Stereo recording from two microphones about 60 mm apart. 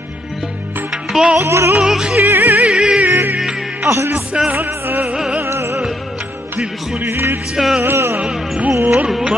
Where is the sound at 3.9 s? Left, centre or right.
Right.